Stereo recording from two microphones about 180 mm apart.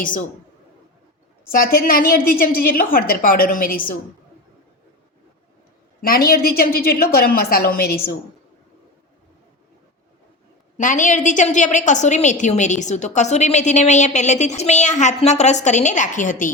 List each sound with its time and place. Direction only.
1.5 s a woman's voice: 55° left (ahead or behind)
6.0 s a woman's voice: 55° left (ahead or behind)
10.8 s a woman's voice: 45° left (ahead or behind)